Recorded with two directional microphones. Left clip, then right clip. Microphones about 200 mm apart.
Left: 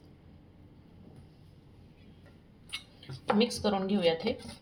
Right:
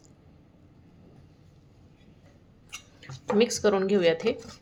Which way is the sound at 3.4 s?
35° right (ahead or behind).